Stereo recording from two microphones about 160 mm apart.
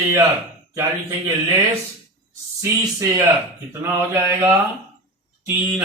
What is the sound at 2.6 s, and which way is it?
Speech, 20° right (ahead or behind).